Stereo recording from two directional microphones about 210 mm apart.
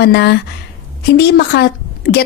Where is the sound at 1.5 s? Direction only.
50° left (ahead or behind).